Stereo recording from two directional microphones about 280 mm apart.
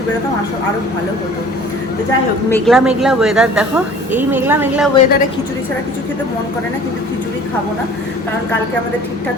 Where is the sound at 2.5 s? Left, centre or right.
Centre.